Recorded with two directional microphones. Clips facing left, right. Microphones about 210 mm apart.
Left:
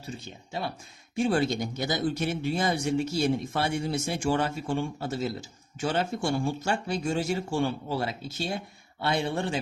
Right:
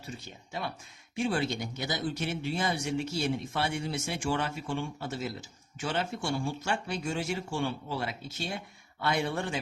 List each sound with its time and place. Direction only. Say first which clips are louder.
1.1 s speech: left 5 dB; 40° left (ahead or behind)